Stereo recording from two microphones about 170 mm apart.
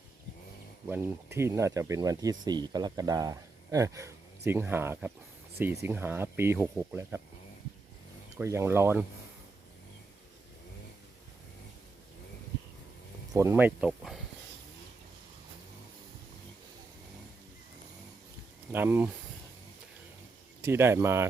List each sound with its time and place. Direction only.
0.9 s speech: 15° right (ahead or behind)
8.4 s speech: 15° right (ahead or behind)
13.3 s speech: 15° right (ahead or behind)
18.7 s speech: 10° right (ahead or behind)
20.7 s speech: 15° right (ahead or behind)